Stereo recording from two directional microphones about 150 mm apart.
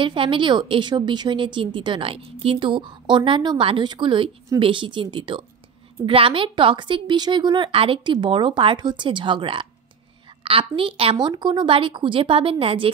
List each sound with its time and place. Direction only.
0.0 s a woman's voice: 35° right (ahead or behind)